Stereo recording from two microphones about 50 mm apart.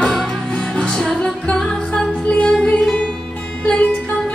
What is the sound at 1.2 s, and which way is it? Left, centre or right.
Music, centre.